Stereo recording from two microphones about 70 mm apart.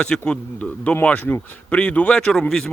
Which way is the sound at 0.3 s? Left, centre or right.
Centre.